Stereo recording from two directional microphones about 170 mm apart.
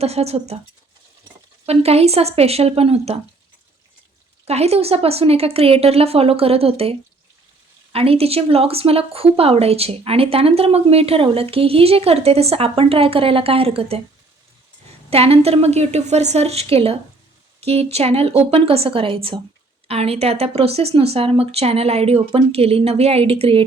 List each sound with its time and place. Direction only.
0.0 s speech: 40° right (ahead or behind)
1.6 s speech: 35° right (ahead or behind)
4.4 s speech: 40° right (ahead or behind)
7.9 s speech: 35° right (ahead or behind)